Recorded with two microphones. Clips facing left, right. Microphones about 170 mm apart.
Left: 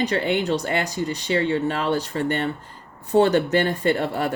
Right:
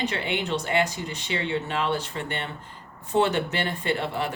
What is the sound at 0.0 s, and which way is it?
Speech, 40° left (ahead or behind).